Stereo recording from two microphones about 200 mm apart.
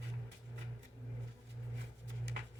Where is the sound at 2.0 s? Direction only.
60° right (ahead or behind).